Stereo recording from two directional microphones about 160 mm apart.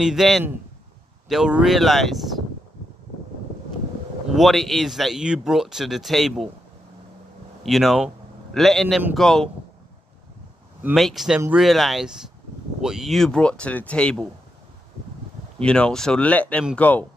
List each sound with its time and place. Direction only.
0.0 s speech: centre (ahead or behind)
4.3 s speech: centre (ahead or behind)
7.6 s speech: centre (ahead or behind)
11.0 s speech: centre (ahead or behind)
15.6 s speech: 5° left (ahead or behind)